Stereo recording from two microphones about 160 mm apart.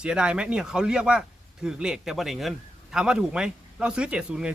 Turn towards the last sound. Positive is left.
turn(degrees=-5)  # may be behind; listen again after turning